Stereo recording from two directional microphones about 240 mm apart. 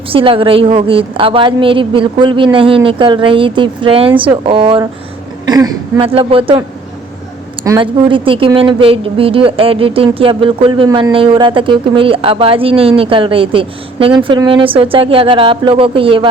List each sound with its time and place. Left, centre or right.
0.1 s a woman's voice: right